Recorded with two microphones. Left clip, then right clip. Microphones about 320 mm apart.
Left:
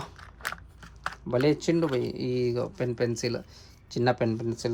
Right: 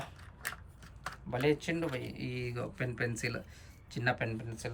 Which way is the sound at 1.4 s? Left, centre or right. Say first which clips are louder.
Left 6 dB; centre.